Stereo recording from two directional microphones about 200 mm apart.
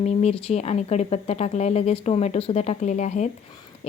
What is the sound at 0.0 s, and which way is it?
A woman's voice, 35° left (ahead or behind).